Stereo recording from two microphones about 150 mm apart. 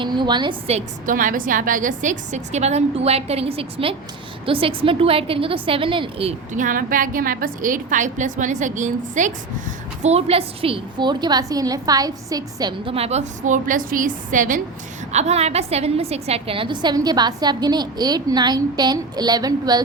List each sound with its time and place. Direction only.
0.0 s a woman's voice: 30° right (ahead or behind)
0.7 s a woman's voice: 45° right (ahead or behind)
1.1 s a woman's voice: 65° right (ahead or behind); by 6.3 s 35° right (ahead or behind)
6.5 s a woman's voice: 60° right (ahead or behind)
10.0 s a woman's voice: 45° right (ahead or behind); by 14.6 s 60° right (ahead or behind)
15.1 s a woman's voice: 45° right (ahead or behind); by 19.8 s 25° right (ahead or behind)